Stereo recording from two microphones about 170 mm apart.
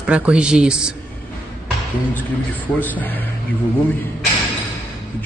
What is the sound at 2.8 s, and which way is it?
Speech, 10° left (ahead or behind).